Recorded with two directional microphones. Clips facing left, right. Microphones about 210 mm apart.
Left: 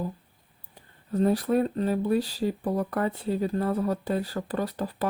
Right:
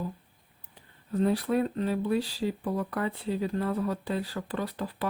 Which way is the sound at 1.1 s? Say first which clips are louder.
Left 3 dB; 45° left (ahead or behind).